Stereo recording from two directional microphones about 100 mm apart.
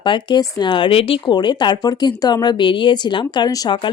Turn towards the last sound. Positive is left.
turn(degrees=40)  # may be behind; listen again after turning